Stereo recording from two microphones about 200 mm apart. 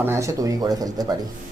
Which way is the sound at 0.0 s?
15° right (ahead or behind).